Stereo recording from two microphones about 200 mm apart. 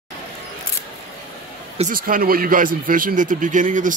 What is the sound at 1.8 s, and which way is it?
Speech, 45° right (ahead or behind).